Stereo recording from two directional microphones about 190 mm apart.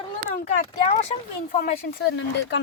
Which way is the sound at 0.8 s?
35° left (ahead or behind).